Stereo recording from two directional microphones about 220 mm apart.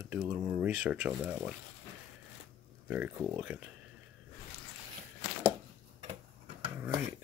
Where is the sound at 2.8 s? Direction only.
5° right (ahead or behind).